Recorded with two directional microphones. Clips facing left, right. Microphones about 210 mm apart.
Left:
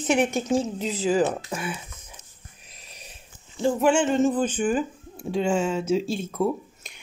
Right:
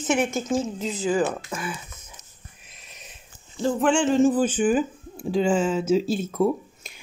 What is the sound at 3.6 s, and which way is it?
Speech, 5° left (ahead or behind).